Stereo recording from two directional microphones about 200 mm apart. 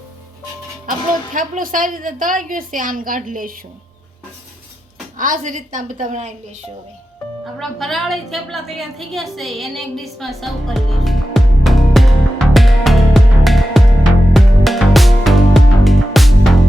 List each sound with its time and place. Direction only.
0.9 s a woman's voice: 40° right (ahead or behind)
5.1 s a woman's voice: 40° right (ahead or behind)
7.6 s a sound: centre (ahead or behind)